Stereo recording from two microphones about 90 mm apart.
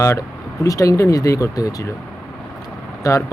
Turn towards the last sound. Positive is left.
turn(degrees=35)  # may be behind; listen again after turning